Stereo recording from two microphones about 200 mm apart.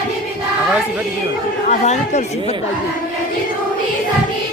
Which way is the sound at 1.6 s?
35° left (ahead or behind).